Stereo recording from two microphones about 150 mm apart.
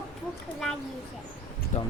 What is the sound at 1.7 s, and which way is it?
Speech, 55° left (ahead or behind).